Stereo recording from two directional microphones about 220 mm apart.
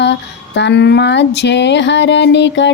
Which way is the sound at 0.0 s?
50° left (ahead or behind).